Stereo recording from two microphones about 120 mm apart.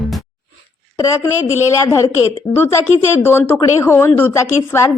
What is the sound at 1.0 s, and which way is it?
Speech, 25° left (ahead or behind).